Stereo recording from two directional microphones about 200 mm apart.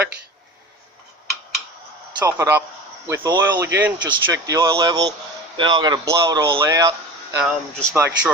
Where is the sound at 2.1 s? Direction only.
10° right (ahead or behind).